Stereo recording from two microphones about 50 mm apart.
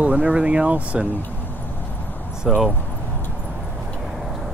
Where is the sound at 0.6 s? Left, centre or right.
Right.